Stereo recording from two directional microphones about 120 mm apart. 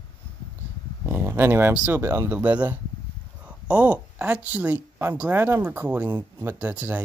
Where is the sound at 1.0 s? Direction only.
20° right (ahead or behind).